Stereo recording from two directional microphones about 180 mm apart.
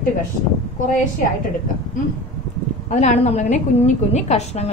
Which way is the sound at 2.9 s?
40° left (ahead or behind).